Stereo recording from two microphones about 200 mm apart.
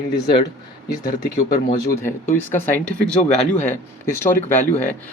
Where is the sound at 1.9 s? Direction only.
15° left (ahead or behind).